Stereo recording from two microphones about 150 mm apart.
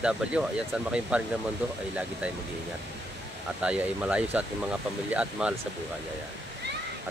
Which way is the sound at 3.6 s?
10° right (ahead or behind).